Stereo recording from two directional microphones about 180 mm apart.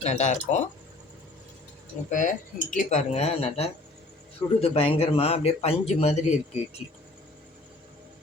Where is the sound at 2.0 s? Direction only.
45° left (ahead or behind).